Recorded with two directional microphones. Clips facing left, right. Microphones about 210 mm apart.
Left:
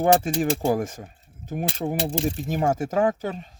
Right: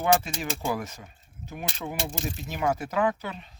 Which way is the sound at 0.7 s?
50° left (ahead or behind).